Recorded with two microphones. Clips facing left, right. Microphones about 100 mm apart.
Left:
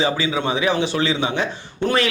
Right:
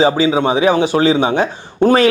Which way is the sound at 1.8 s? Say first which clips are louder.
Right 9 dB; 45° right (ahead or behind).